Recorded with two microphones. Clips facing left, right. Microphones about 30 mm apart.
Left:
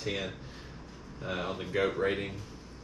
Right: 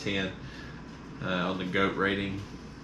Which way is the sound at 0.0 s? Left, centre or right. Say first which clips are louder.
Right 3 dB; right.